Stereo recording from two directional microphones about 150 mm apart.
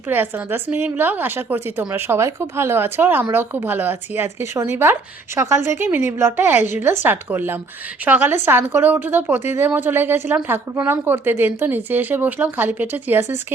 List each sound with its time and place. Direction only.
0.1 s a woman's voice: 10° right (ahead or behind)